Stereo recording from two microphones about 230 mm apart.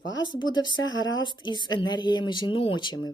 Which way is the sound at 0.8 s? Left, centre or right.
Left.